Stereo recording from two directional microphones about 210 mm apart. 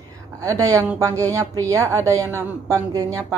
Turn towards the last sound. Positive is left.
turn(degrees=-15)  # may be behind; listen again after turning